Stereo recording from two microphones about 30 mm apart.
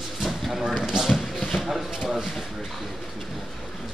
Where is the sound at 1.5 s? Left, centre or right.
Centre.